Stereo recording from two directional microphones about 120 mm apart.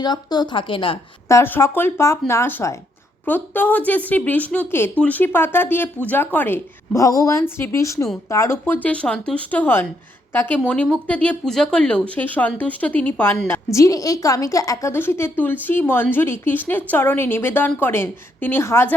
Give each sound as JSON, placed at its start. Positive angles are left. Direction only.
{"t": 0.0, "sound": "speech", "side_deg": 35}
{"t": 1.3, "sound": "a woman's voice", "side_deg": 20}
{"t": 13.7, "sound": "a woman's voice", "side_deg": 30}